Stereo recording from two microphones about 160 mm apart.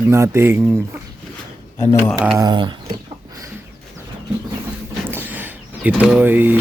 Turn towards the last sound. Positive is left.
turn(degrees=-10)  # may be behind; listen again after turning